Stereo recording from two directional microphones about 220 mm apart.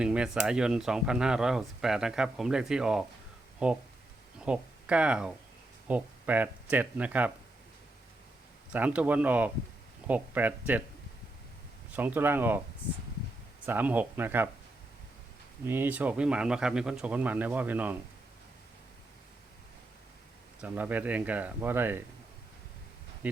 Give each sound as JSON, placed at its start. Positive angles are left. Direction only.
{"t": 0.0, "sound": "speech", "side_deg": -5}
{"t": 8.7, "sound": "speech", "side_deg": -5}
{"t": 11.9, "sound": "speech", "side_deg": -10}
{"t": 13.7, "sound": "speech", "side_deg": -10}
{"t": 15.6, "sound": "speech", "side_deg": -10}
{"t": 20.6, "sound": "speech", "side_deg": -10}
{"t": 23.2, "sound": "speech", "side_deg": -5}